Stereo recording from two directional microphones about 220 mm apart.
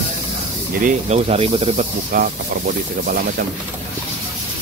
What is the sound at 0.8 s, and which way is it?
Speech, 30° right (ahead or behind).